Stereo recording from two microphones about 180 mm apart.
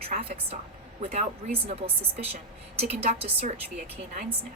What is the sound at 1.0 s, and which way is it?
A woman's voice, 35° right (ahead or behind).